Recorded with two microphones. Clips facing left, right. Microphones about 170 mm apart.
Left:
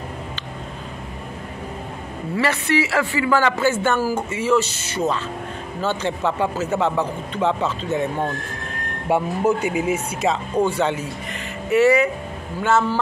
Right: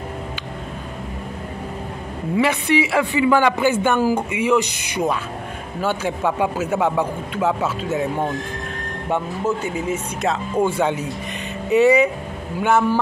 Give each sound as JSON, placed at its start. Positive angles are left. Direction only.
{"t": 2.3, "sound": "a man's voice", "side_deg": -15}
{"t": 9.1, "sound": "speech", "side_deg": 10}
{"t": 10.8, "sound": "a man's voice", "side_deg": -15}